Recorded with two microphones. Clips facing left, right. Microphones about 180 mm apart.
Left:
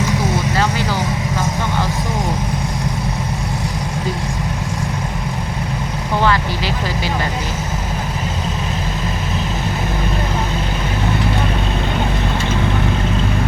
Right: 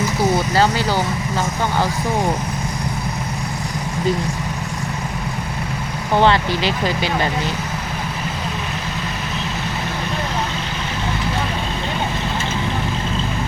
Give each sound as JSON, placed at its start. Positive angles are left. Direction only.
{"t": 6.2, "sound": "vehicle", "side_deg": -25}